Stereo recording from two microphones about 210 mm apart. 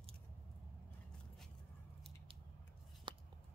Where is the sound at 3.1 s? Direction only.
25° right (ahead or behind).